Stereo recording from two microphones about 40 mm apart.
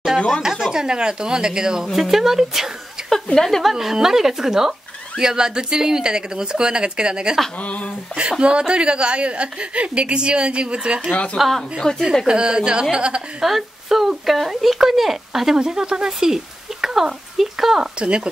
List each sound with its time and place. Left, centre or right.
0.4 s speech: centre
0.8 s a woman's voice: right
2.0 s speech: centre
3.0 s a sound: centre
3.3 s a woman's voice: centre
3.7 s speech: centre
7.6 s speech: left
8.2 s a woman's voice: right
11.3 s speech: centre
11.8 s a woman's voice: left
12.3 s a woman's voice: right
13.4 s speech: centre
17.9 s a woman's voice: right